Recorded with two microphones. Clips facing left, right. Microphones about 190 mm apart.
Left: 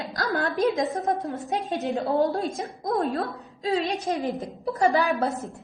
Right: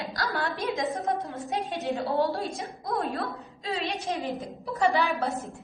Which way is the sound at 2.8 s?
45° left (ahead or behind).